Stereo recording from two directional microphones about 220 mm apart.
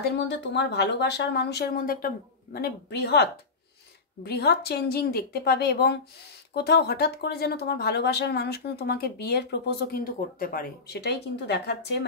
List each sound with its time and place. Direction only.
0.0 s speech: 50° left (ahead or behind)